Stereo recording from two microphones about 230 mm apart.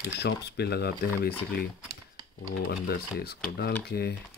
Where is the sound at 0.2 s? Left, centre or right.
Left.